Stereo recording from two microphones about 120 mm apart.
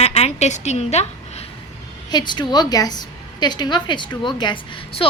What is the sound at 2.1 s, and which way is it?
A woman's voice, 40° left (ahead or behind).